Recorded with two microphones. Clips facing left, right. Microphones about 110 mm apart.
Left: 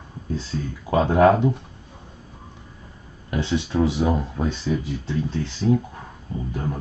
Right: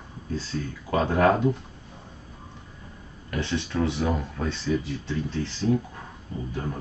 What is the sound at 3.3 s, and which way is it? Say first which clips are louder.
Speech: left 5 dB; 15° left (ahead or behind).